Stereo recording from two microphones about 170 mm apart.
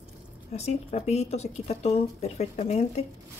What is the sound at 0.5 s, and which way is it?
A woman's voice, 40° left (ahead or behind).